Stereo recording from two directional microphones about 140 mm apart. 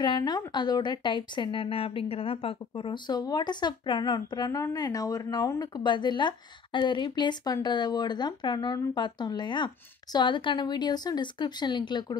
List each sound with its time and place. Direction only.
0.0 s a woman's voice: 30° left (ahead or behind)